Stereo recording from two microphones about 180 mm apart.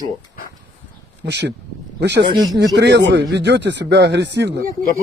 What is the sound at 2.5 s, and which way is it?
Speech, 70° right (ahead or behind).